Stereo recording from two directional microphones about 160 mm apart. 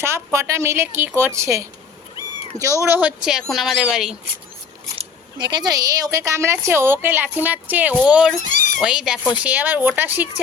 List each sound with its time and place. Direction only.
0.0 s a woman's voice: 15° right (ahead or behind)
2.1 s cat: 20° right (ahead or behind)
2.8 s speech: 10° right (ahead or behind)
5.4 s a woman's voice: 30° right (ahead or behind); by 8.4 s 5° right (ahead or behind)
8.4 s a sound: 50° left (ahead or behind)
8.8 s a woman's voice: 5° right (ahead or behind)